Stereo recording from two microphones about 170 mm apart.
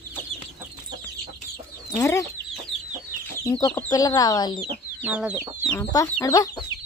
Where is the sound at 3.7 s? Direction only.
15° left (ahead or behind).